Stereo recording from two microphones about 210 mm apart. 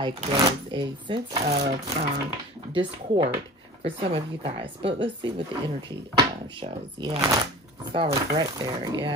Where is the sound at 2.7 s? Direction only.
25° right (ahead or behind).